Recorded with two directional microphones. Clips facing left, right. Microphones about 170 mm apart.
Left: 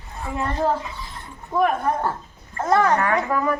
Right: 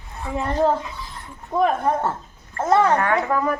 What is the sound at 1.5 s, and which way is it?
Speech, 20° right (ahead or behind).